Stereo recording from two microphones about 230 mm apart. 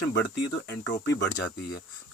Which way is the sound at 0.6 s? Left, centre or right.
Left.